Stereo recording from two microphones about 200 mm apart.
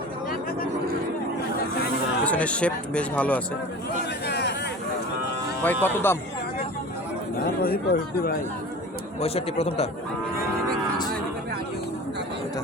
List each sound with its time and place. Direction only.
2.2 s speech: 5° left (ahead or behind)
4.3 s a sound: 55° left (ahead or behind)
5.6 s speech: 10° left (ahead or behind)
7.3 s speech: 45° left (ahead or behind)
9.2 s speech: 30° left (ahead or behind)